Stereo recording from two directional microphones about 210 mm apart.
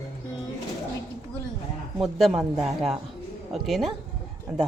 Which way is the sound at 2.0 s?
Centre (ahead or behind).